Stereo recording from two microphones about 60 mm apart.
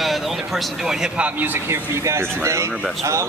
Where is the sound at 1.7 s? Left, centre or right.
Right.